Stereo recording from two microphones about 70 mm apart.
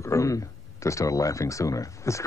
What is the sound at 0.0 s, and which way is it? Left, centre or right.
Speech, left.